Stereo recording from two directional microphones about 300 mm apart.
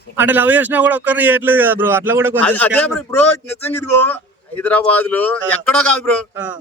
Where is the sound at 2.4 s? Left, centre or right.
Centre.